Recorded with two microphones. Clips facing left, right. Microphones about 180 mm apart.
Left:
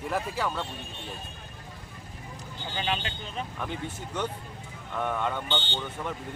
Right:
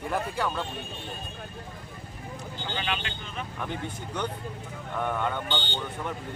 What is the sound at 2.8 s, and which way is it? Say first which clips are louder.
Speech: left 4 dB; 30° left (ahead or behind).